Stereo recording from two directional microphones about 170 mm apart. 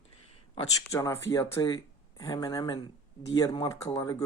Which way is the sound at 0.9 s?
20° left (ahead or behind).